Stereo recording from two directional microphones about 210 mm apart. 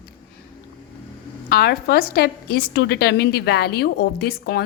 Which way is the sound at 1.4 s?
45° left (ahead or behind).